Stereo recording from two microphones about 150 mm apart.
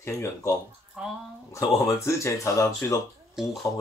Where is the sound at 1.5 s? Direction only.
20° left (ahead or behind).